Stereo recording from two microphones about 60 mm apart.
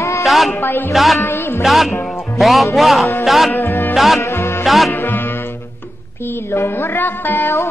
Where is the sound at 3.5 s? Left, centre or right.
Left.